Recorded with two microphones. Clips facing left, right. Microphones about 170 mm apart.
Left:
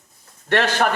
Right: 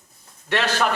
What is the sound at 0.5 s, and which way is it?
Speech, 50° left (ahead or behind).